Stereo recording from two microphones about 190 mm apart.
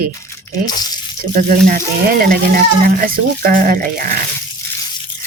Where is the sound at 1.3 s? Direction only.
45° right (ahead or behind).